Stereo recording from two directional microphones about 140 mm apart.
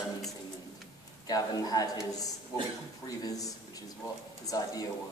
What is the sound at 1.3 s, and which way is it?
A man's voice, 25° left (ahead or behind).